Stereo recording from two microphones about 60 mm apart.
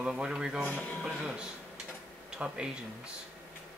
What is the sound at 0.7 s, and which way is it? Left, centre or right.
Speech, left.